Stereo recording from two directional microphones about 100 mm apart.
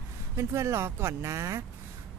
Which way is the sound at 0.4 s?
30° right (ahead or behind).